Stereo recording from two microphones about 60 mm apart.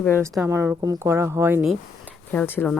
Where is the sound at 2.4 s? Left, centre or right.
Left.